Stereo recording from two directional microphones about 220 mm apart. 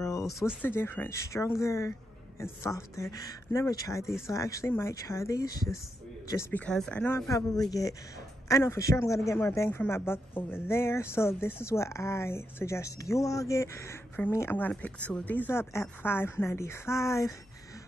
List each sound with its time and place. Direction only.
0.0 s a sound: 15° left (ahead or behind)
0.3 s speech: centre (ahead or behind)
0.7 s speech: 10° left (ahead or behind)